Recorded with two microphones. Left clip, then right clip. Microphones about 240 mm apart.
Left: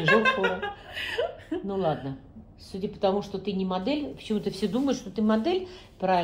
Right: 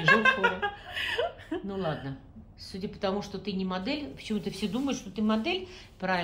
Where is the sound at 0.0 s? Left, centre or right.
Centre.